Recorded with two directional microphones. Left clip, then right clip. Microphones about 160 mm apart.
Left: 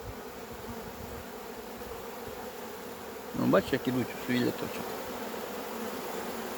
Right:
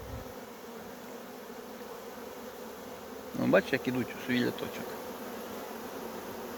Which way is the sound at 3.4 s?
15° left (ahead or behind).